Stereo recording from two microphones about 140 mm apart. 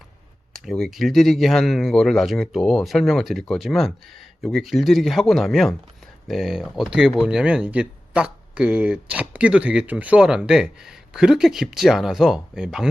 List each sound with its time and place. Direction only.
0.6 s speech: centre (ahead or behind)